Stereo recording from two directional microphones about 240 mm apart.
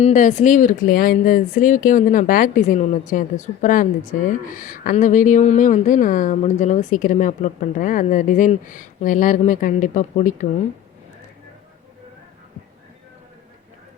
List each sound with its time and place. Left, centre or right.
0.0 s speech: left